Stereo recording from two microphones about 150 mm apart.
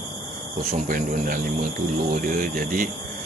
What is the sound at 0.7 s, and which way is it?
Speech, 65° right (ahead or behind).